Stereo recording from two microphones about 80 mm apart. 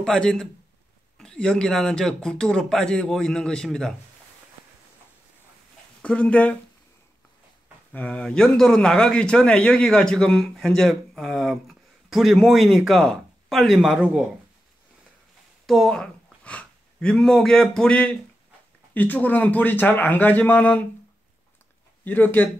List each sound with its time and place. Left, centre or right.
0.0 s speech: centre
6.0 s speech: centre
7.9 s a man's voice: centre
15.6 s a man's voice: centre
22.0 s a man's voice: left